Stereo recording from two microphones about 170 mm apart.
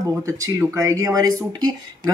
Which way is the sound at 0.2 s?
15° right (ahead or behind).